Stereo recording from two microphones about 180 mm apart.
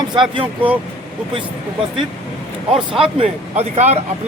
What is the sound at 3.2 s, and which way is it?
Speech, 35° right (ahead or behind).